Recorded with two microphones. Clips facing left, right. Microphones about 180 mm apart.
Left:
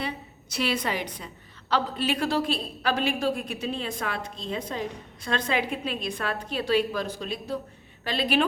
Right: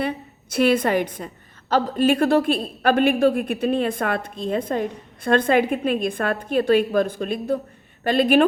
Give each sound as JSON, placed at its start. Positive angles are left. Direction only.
{"t": 0.5, "sound": "a woman's voice", "side_deg": -50}